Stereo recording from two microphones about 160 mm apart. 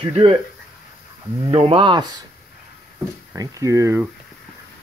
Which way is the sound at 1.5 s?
35° right (ahead or behind).